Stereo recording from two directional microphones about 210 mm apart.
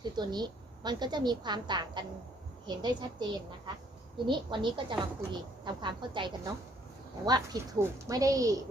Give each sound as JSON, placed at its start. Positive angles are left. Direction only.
{"t": 0.0, "sound": "a woman's voice", "side_deg": -20}
{"t": 4.3, "sound": "a woman's voice", "side_deg": -20}